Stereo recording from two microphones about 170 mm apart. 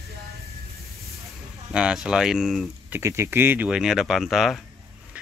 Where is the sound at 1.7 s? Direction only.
5° right (ahead or behind).